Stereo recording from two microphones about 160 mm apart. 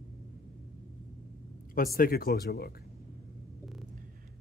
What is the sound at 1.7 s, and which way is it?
Speech, 60° left (ahead or behind).